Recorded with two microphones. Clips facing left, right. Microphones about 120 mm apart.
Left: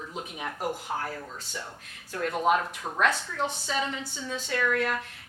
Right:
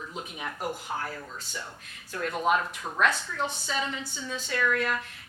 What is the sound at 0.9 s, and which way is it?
A woman's voice, 40° left (ahead or behind).